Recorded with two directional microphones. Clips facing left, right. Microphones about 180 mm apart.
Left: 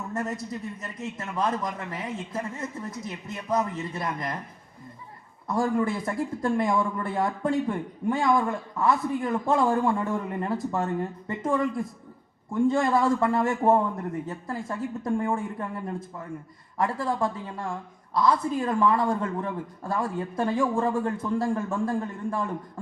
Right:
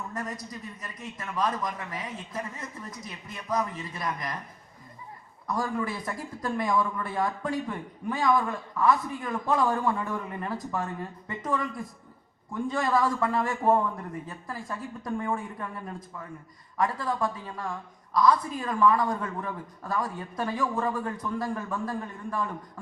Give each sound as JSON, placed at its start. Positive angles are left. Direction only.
{"t": 0.1, "sound": "a woman's voice", "side_deg": 25}
{"t": 5.5, "sound": "a woman's voice", "side_deg": 25}